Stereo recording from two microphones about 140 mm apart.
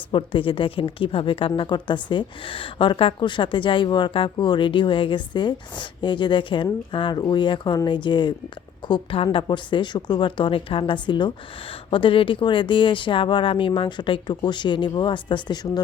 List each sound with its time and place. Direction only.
0.1 s a woman's voice: 35° left (ahead or behind)